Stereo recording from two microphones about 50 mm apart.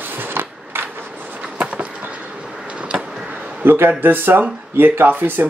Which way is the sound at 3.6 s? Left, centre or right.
Right.